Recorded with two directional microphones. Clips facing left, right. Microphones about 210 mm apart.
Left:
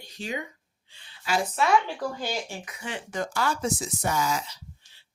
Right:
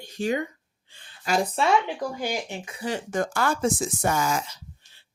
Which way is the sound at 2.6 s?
35° right (ahead or behind).